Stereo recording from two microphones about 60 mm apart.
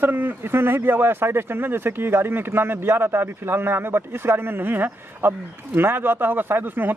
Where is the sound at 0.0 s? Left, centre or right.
Right.